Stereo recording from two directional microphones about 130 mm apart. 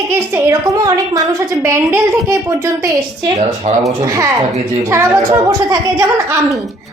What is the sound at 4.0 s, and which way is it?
A woman's voice, 25° right (ahead or behind).